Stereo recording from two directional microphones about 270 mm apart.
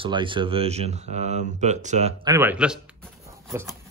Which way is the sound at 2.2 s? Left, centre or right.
Centre.